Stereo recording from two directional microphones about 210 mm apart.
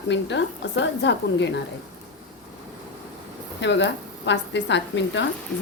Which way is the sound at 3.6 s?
60° left (ahead or behind).